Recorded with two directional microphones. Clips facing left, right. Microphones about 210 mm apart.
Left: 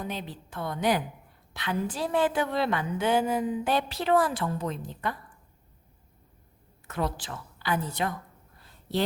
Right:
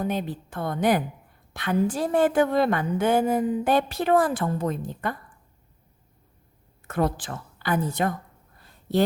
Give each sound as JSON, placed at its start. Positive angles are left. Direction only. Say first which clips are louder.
{"t": 0.0, "sound": "a woman's voice", "louder": "right 8 dB", "side_deg": -50}
{"t": 6.8, "sound": "a woman's voice", "louder": "right 6 dB", "side_deg": -50}